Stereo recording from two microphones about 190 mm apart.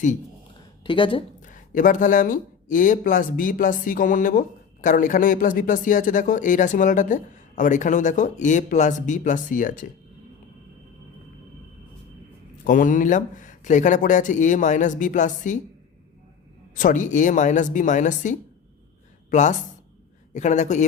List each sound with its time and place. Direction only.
0.9 s speech: 25° left (ahead or behind)
1.4 s speech: 45° left (ahead or behind)
12.6 s speech: 45° left (ahead or behind)
16.7 s speech: 45° left (ahead or behind)